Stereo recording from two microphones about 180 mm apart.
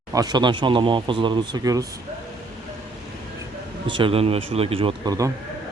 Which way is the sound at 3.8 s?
30° right (ahead or behind).